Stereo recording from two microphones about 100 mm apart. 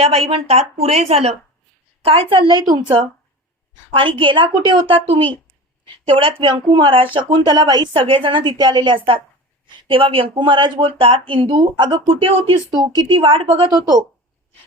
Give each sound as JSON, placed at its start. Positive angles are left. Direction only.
{"t": 0.0, "sound": "a woman's voice", "side_deg": -80}
{"t": 2.0, "sound": "a woman's voice", "side_deg": -70}
{"t": 2.5, "sound": "a woman's voice", "side_deg": -45}
{"t": 4.2, "sound": "a woman's voice", "side_deg": -55}
{"t": 6.4, "sound": "a woman's voice", "side_deg": -55}
{"t": 8.0, "sound": "speech", "side_deg": -60}
{"t": 12.7, "sound": "a woman's voice", "side_deg": -45}
{"t": 13.2, "sound": "a woman's voice", "side_deg": -70}
{"t": 13.7, "sound": "speech", "side_deg": -40}